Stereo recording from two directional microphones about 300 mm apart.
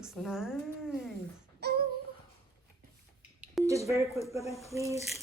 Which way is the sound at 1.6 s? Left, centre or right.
Right.